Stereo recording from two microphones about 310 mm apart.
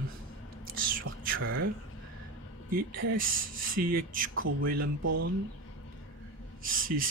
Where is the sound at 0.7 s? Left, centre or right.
Right.